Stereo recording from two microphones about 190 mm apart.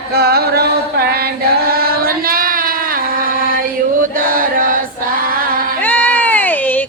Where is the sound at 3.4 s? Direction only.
50° right (ahead or behind).